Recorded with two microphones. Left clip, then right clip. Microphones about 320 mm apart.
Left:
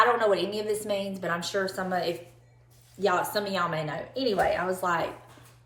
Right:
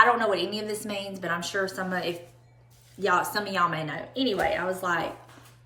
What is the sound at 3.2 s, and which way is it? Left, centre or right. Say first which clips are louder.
Speech: right 1 dB; left.